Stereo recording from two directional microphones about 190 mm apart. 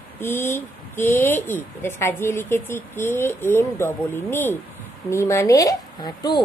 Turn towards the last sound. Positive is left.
turn(degrees=20)  # may be behind; listen again after turning